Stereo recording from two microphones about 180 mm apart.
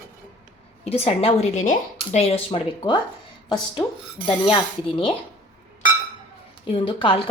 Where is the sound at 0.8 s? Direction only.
35° left (ahead or behind).